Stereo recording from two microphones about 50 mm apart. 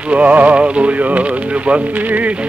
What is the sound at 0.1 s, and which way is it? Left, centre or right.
Speech, right.